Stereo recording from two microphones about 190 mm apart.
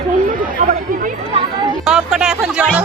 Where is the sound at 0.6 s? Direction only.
45° right (ahead or behind).